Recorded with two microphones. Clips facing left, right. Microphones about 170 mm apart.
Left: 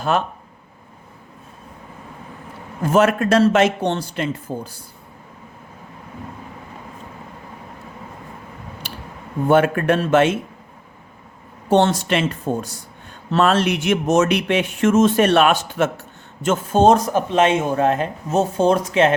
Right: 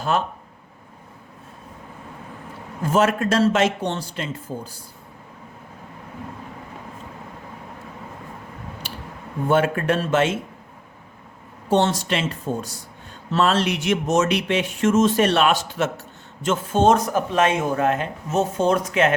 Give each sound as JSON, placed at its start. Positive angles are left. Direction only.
{"t": 2.8, "sound": "speech", "side_deg": 60}
{"t": 9.5, "sound": "speech", "side_deg": 55}
{"t": 11.7, "sound": "speech", "side_deg": 60}
{"t": 16.8, "sound": "speech", "side_deg": 30}